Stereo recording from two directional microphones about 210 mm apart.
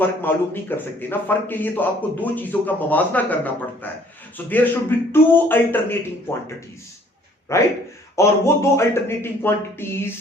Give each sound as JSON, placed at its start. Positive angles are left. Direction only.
{"t": 0.0, "sound": "a man's voice", "side_deg": 10}
{"t": 7.5, "sound": "a man's voice", "side_deg": 15}